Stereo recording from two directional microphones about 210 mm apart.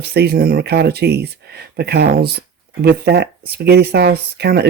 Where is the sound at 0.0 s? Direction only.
50° right (ahead or behind).